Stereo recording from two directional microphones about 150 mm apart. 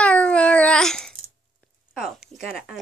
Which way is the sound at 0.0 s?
10° left (ahead or behind).